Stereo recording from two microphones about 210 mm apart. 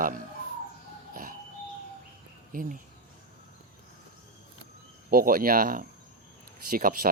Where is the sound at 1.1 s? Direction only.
40° right (ahead or behind).